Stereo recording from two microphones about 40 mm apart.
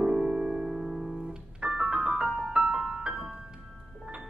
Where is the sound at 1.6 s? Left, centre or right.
Centre.